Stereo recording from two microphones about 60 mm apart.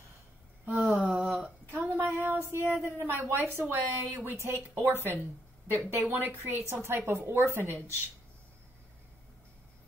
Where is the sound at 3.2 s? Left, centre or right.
Right.